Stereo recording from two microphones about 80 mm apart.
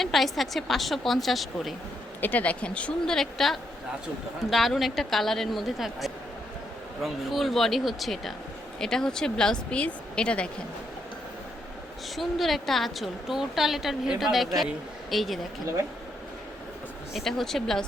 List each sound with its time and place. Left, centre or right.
0.0 s a woman's voice: centre
2.2 s a woman's voice: centre
12.1 s a woman's voice: centre
17.2 s a woman's voice: centre